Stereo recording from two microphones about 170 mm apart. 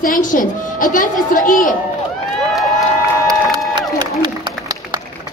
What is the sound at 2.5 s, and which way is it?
Crowd, centre (ahead or behind).